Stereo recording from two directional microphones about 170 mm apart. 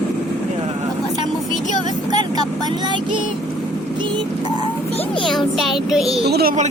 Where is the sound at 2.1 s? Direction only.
25° right (ahead or behind).